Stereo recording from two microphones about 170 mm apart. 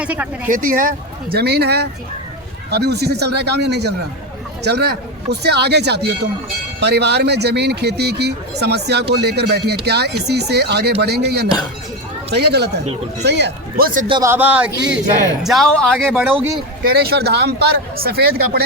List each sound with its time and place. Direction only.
0.0 s speech: 10° right (ahead or behind)
0.5 s speech: 55° right (ahead or behind); by 12.8 s 75° right (ahead or behind)
12.8 s speech: 40° right (ahead or behind)
13.2 s speech: 80° right; by 14.0 s 60° right (ahead or behind)
14.1 s speech: 15° right (ahead or behind)
15.4 s speech: centre (ahead or behind)
16.1 s speech: 5° right (ahead or behind)
16.8 s speech: 65° right (ahead or behind)